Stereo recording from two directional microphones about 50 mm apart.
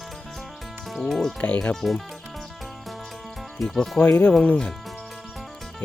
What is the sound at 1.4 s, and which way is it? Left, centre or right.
Speech, left.